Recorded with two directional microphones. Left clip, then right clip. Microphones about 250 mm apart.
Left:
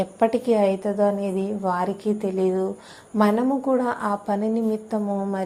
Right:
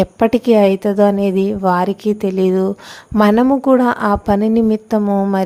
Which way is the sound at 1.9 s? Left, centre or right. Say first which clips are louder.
Right 7 dB; right.